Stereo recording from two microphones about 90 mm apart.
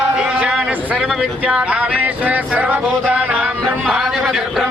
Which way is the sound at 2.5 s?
20° right (ahead or behind).